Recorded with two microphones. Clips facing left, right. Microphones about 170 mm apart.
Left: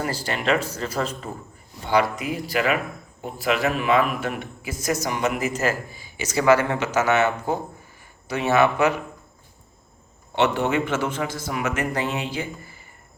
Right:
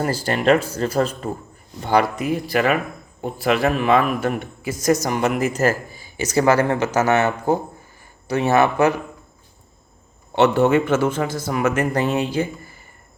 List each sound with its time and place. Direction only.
0.0 s a man's voice: 45° right (ahead or behind)
10.3 s a man's voice: 45° right (ahead or behind)